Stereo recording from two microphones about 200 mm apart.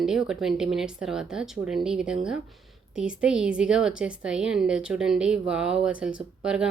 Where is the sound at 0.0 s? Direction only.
5° right (ahead or behind).